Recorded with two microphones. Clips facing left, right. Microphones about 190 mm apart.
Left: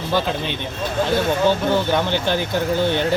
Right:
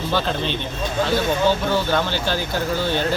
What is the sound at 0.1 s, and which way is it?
Speech, 10° left (ahead or behind).